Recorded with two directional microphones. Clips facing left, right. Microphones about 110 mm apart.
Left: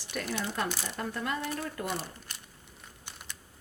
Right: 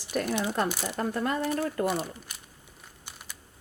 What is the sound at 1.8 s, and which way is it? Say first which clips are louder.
Speech: right 7 dB; 5° right (ahead or behind).